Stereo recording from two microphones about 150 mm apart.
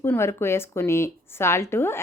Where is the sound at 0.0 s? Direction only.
15° left (ahead or behind).